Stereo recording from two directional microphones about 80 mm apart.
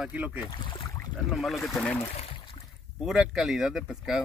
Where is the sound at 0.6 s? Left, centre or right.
Left.